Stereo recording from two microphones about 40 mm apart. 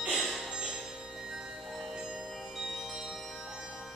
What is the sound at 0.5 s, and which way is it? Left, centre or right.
Music, right.